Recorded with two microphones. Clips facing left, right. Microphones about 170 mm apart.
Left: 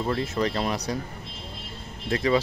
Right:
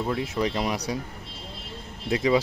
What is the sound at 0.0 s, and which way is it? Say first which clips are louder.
Speech: left 1 dB; 10° right (ahead or behind).